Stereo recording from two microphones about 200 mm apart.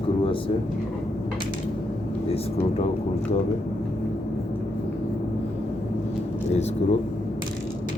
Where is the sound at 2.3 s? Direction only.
30° left (ahead or behind).